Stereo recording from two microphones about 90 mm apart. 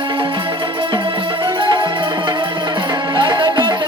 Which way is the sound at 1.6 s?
55° right (ahead or behind).